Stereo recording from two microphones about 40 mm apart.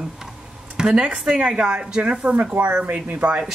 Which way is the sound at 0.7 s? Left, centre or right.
Right.